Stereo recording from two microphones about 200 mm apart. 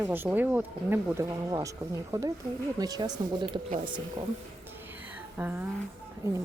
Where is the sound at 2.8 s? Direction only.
20° right (ahead or behind).